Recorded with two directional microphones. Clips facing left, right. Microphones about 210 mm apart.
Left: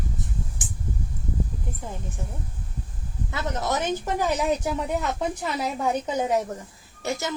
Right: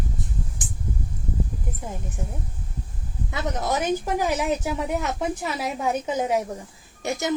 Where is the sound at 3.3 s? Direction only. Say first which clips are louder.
Right 1 dB; 15° right (ahead or behind).